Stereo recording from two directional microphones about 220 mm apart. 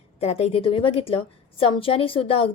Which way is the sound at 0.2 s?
30° left (ahead or behind).